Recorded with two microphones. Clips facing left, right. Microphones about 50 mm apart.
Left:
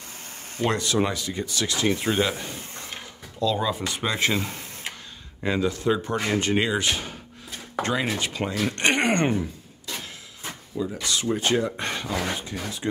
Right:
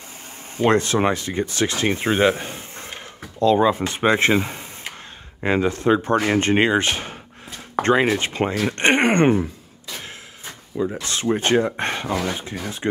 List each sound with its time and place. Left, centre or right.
0.7 s speech: right
4.4 s speech: centre
5.4 s speech: right
10.8 s speech: right